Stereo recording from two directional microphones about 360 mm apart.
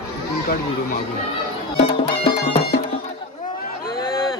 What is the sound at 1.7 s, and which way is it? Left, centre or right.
Music, centre.